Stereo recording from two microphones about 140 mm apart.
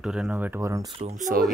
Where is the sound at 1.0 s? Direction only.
75° right (ahead or behind).